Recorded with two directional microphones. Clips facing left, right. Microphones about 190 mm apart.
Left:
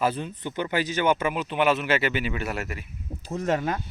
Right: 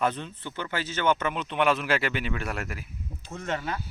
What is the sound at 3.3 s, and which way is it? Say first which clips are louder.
Speech: left 6 dB; 40° left (ahead or behind).